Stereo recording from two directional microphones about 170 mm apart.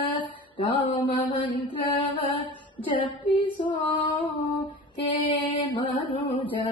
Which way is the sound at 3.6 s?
30° left (ahead or behind).